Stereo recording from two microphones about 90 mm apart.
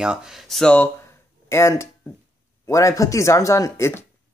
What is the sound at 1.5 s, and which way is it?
Speech, 30° left (ahead or behind).